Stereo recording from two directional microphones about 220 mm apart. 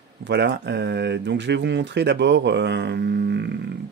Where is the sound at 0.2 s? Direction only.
50° right (ahead or behind).